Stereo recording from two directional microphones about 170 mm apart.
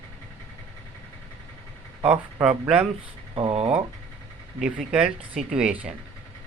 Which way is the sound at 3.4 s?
35° right (ahead or behind).